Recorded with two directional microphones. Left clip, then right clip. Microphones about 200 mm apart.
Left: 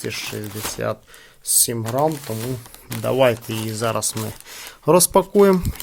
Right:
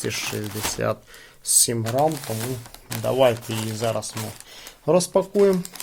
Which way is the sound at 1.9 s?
25° left (ahead or behind).